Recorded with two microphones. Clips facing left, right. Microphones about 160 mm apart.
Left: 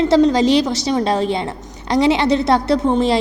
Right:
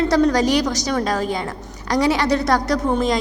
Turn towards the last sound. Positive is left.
turn(degrees=25)  # may be behind; listen again after turning